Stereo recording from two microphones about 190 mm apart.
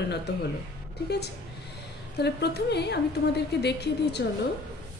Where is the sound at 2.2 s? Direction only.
60° left (ahead or behind).